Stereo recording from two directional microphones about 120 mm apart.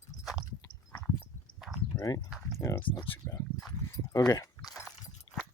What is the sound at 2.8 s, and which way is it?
Speech, 45° left (ahead or behind).